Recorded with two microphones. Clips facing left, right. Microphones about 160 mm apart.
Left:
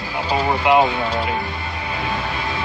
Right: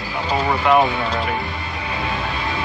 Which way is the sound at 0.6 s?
20° left (ahead or behind).